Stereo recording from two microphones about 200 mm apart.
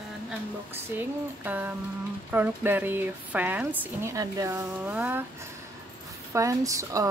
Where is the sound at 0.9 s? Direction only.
10° right (ahead or behind).